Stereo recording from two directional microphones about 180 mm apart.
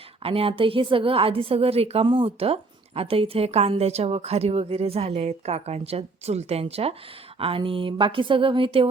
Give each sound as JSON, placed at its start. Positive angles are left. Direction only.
{"t": 0.2, "sound": "a woman's voice", "side_deg": -30}